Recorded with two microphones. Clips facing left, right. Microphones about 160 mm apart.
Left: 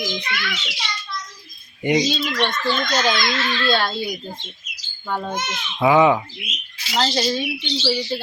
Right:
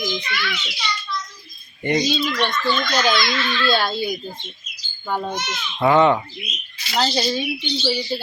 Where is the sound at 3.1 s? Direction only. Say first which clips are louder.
Right 1 dB; 45° left (ahead or behind).